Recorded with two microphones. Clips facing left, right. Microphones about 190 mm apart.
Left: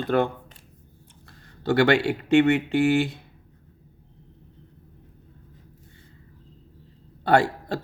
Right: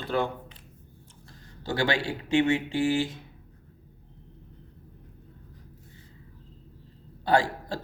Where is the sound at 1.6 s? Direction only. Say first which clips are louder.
Left 8 dB; 60° left (ahead or behind).